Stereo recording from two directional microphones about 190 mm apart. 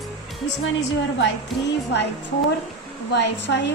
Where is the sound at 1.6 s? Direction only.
65° left (ahead or behind).